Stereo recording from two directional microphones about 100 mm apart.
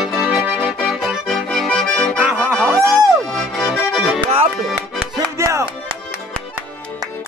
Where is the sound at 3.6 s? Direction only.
5° right (ahead or behind).